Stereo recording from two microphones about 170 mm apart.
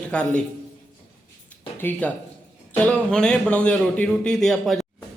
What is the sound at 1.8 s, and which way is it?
A woman's voice, 10° left (ahead or behind).